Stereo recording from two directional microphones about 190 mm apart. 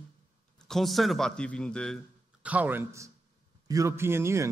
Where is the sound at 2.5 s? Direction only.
10° right (ahead or behind).